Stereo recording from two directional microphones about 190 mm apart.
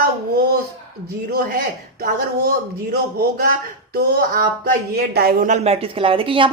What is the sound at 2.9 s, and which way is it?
A man's voice, 55° right (ahead or behind).